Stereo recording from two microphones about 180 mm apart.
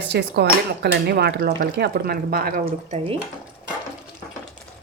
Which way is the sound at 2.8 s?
35° right (ahead or behind).